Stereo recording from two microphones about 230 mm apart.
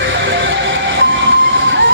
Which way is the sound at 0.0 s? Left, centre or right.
Right.